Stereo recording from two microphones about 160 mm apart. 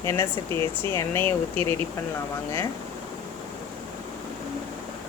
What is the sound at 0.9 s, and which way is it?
Speech, 15° left (ahead or behind).